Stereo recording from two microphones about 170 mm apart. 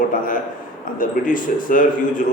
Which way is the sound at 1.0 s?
55° left (ahead or behind).